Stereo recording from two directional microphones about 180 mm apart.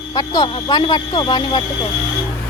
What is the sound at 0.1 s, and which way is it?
Speech, 20° left (ahead or behind).